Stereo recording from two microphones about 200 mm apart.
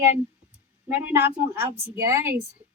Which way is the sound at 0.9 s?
10° right (ahead or behind).